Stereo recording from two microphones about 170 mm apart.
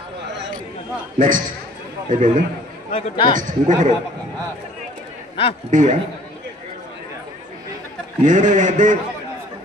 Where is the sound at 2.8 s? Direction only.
45° left (ahead or behind).